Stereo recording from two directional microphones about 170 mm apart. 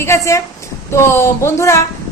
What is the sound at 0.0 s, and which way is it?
A woman's voice, 15° left (ahead or behind).